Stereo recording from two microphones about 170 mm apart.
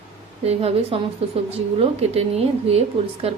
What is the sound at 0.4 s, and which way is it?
A woman's voice, 35° right (ahead or behind).